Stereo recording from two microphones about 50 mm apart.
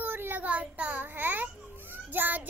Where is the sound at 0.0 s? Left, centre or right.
Right.